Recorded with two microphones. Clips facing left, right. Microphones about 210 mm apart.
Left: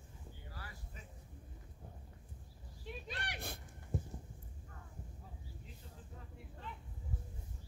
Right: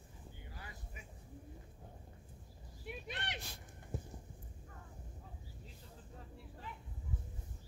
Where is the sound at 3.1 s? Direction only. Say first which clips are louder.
Right 1 dB; 20° right (ahead or behind).